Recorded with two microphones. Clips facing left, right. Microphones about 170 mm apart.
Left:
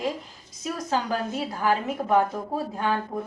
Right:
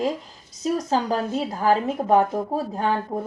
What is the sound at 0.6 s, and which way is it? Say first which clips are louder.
Speech: right 5 dB; 35° right (ahead or behind).